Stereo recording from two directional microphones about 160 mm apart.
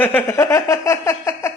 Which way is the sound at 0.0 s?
10° left (ahead or behind).